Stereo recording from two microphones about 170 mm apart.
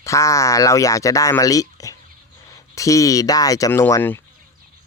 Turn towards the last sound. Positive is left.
turn(degrees=15)  # may be behind; listen again after turning